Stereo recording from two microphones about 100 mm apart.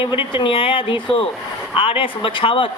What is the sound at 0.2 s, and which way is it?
Speech, 60° left (ahead or behind).